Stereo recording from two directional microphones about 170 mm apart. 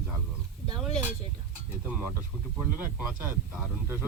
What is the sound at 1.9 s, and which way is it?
Speech, 10° right (ahead or behind).